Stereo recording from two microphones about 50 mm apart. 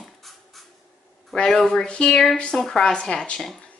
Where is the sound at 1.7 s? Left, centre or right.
Centre.